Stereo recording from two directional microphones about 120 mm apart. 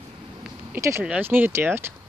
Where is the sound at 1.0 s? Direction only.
15° right (ahead or behind).